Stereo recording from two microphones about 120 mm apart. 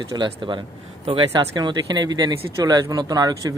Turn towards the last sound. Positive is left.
turn(degrees=-35)  # may be behind; listen again after turning